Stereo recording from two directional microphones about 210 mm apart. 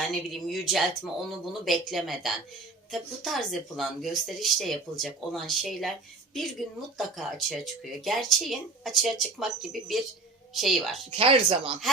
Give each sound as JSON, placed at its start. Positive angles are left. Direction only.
{"t": 0.1, "sound": "speech", "side_deg": 0}
{"t": 6.9, "sound": "speech", "side_deg": 0}
{"t": 11.1, "sound": "speech", "side_deg": -25}